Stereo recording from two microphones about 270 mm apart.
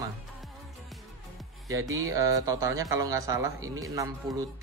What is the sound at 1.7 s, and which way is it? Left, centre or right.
A man's voice, centre.